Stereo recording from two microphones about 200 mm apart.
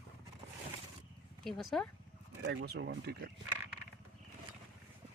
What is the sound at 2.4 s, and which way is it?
Speech, 60° right (ahead or behind).